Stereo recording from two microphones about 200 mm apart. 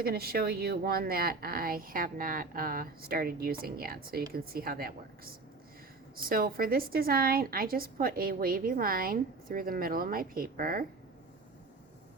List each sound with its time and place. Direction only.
0.0 s a woman's voice: 50° right (ahead or behind)